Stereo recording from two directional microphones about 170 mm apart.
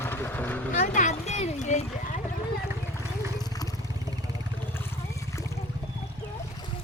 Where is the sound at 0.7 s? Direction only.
45° left (ahead or behind).